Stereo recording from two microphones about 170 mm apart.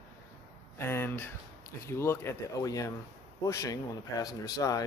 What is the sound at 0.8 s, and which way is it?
Speech, 15° left (ahead or behind).